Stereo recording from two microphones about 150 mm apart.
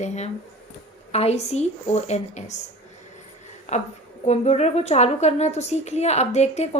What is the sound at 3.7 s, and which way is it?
A woman's voice, 50° left (ahead or behind).